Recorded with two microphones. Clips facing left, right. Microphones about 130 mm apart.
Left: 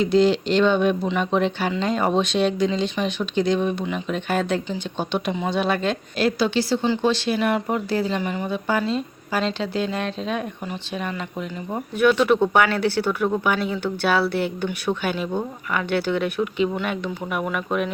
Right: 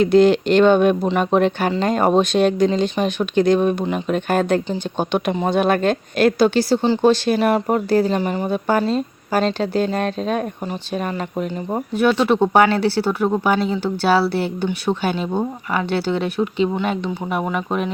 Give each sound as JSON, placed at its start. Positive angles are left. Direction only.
{"t": 0.0, "sound": "a woman's voice", "side_deg": -55}